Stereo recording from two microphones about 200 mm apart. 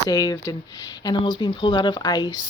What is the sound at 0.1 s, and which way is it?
Speech, 20° left (ahead or behind).